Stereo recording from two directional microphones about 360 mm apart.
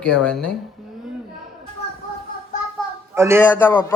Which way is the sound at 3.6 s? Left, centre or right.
Centre.